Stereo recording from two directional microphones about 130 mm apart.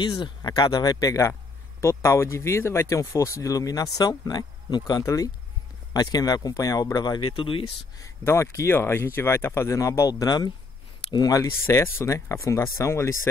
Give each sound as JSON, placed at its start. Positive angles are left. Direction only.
{"t": 0.0, "sound": "speech", "side_deg": 40}
{"t": 8.0, "sound": "speech", "side_deg": 20}